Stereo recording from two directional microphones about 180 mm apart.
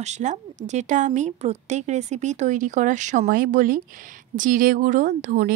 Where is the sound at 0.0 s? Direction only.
40° right (ahead or behind).